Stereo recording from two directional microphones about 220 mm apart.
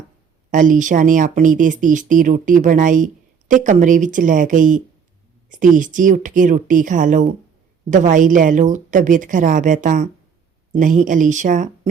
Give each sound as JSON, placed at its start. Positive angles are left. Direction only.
{"t": 0.5, "sound": "speech", "side_deg": -35}